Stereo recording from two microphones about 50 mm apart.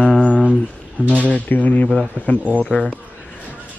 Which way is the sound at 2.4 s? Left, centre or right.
Right.